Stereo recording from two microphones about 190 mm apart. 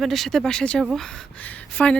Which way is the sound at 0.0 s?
Centre (ahead or behind).